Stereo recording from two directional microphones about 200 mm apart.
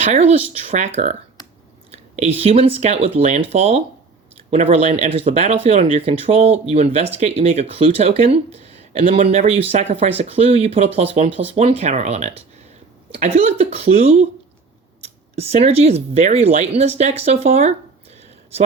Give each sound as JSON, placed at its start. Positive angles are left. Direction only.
{"t": 0.0, "sound": "speech", "side_deg": -35}